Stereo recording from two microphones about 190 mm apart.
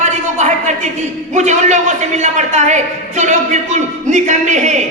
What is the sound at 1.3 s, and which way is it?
A woman's voice, 40° right (ahead or behind).